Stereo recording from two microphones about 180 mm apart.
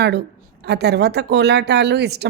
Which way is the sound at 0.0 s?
65° right (ahead or behind).